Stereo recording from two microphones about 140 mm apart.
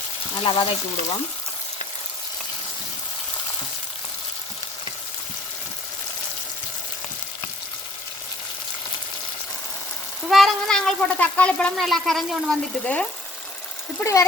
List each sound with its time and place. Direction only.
0.3 s speech: 35° left (ahead or behind)
10.2 s speech: centre (ahead or behind)
14.0 s speech: 20° left (ahead or behind)